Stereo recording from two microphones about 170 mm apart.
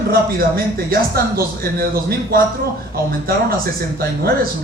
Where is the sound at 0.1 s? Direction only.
60° right (ahead or behind).